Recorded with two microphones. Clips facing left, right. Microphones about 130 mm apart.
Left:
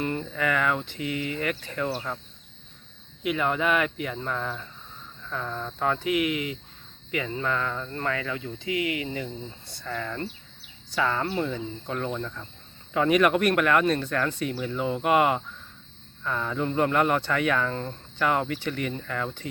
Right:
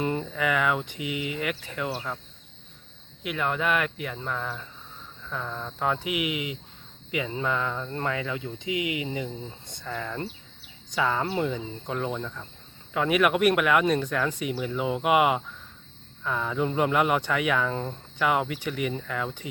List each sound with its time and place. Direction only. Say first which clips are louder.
0.0 s speech: right 1 dB; 15° right (ahead or behind)
3.2 s speech: left 2 dB; centre (ahead or behind)